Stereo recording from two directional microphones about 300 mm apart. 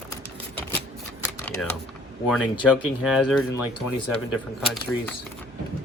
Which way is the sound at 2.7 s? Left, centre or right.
Centre.